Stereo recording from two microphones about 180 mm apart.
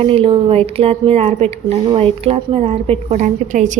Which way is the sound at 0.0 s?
30° right (ahead or behind).